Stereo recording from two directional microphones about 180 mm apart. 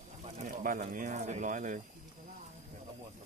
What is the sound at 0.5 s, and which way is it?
Speech, 45° right (ahead or behind).